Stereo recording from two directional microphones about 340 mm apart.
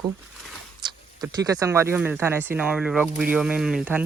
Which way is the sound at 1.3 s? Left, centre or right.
Centre.